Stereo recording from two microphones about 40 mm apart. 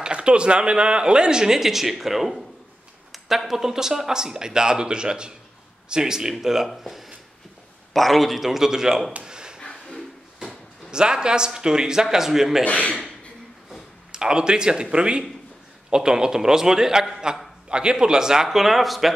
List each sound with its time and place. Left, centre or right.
0.0 s speech: right
9.2 s a sound: centre
9.6 s a sound: left
10.9 s speech: right
12.6 s a man's voice: left
14.1 s speech: centre